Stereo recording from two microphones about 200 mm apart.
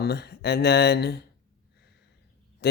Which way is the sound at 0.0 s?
55° left (ahead or behind).